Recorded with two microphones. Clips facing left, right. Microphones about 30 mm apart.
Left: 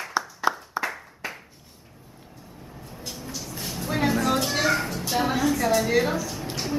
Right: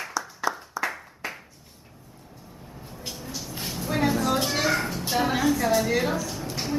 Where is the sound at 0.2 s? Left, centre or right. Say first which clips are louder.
Left 5 dB; left.